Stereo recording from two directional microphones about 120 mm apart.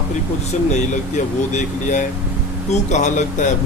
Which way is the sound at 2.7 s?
80° left.